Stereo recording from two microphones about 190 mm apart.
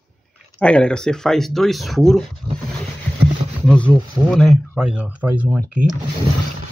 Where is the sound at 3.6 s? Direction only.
5° left (ahead or behind); by 5.6 s 10° right (ahead or behind).